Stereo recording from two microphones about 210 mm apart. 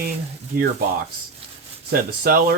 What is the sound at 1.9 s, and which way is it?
Speech, 45° right (ahead or behind).